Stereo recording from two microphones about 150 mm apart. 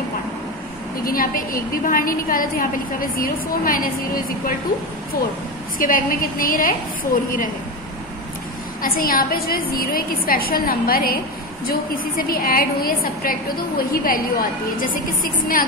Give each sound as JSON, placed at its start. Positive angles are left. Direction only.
{"t": 1.0, "sound": "a woman's voice", "side_deg": 70}
{"t": 5.8, "sound": "a woman's voice", "side_deg": 70}
{"t": 8.8, "sound": "a woman's voice", "side_deg": 75}